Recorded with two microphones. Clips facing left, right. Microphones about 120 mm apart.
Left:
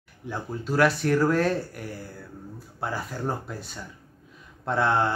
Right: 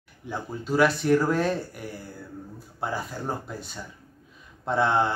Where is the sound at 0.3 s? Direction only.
15° right (ahead or behind).